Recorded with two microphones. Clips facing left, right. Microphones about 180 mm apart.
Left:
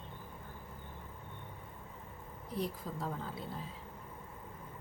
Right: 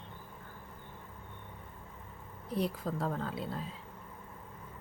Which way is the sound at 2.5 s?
70° right (ahead or behind).